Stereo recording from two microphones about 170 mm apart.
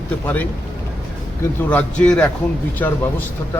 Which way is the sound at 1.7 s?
10° left (ahead or behind).